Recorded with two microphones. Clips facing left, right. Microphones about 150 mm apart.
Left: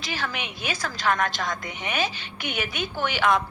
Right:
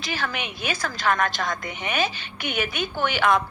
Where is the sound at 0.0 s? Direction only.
55° right (ahead or behind).